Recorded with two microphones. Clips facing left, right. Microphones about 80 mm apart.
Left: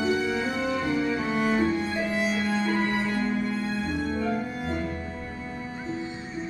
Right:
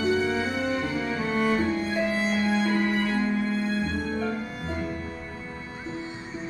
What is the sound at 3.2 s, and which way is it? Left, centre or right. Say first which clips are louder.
Music: right 1 dB; centre.